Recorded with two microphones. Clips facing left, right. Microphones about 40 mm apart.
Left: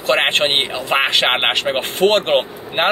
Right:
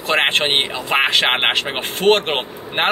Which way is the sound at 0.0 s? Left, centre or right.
Centre.